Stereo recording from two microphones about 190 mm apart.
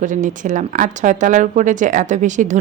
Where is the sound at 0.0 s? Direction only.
40° right (ahead or behind).